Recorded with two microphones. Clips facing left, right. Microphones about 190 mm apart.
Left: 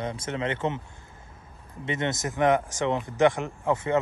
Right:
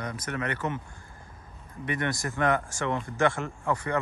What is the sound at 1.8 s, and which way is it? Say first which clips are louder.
Speech: left 2 dB; 25° left (ahead or behind).